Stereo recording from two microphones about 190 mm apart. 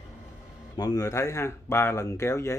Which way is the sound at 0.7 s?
20° left (ahead or behind).